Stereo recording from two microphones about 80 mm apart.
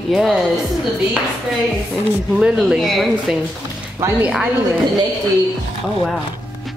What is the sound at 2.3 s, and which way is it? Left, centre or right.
A woman's voice, centre.